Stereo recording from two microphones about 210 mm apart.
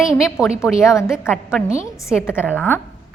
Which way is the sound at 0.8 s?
15° left (ahead or behind).